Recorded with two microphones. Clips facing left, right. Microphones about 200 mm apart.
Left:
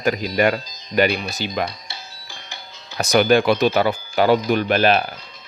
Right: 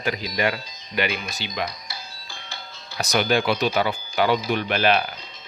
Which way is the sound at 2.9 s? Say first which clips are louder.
Left 6 dB; 50° left (ahead or behind).